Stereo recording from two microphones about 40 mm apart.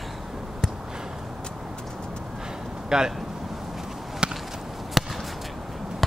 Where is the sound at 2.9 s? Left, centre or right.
Centre.